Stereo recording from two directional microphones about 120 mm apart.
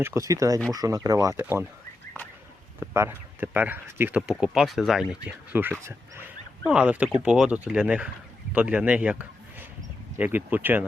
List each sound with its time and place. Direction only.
0.0 s speech: 25° right (ahead or behind)
2.8 s speech: 20° right (ahead or behind)
4.3 s speech: 5° right (ahead or behind)
5.5 s a man's voice: 15° right (ahead or behind)